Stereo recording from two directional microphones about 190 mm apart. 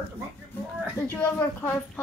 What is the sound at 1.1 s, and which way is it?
Speech, 10° left (ahead or behind).